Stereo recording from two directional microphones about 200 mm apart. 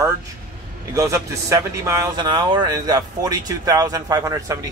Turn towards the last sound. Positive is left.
turn(degrees=-15)  # may be behind; listen again after turning